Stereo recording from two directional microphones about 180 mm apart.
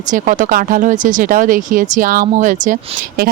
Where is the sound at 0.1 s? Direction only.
45° right (ahead or behind).